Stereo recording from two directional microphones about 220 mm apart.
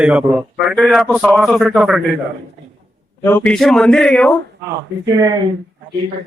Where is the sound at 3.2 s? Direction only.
10° left (ahead or behind).